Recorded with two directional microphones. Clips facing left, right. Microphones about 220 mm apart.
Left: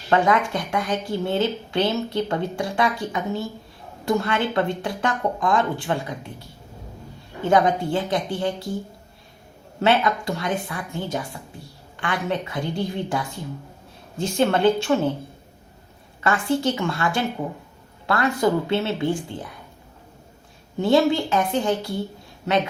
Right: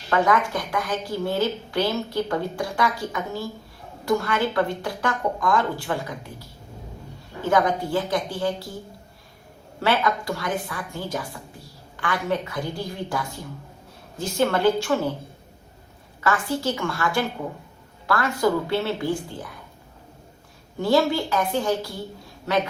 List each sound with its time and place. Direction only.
0.1 s speech: 25° left (ahead or behind)
7.5 s speech: 25° left (ahead or behind)
9.8 s speech: 20° left (ahead or behind)
16.2 s speech: 25° left (ahead or behind)
20.8 s speech: 20° left (ahead or behind)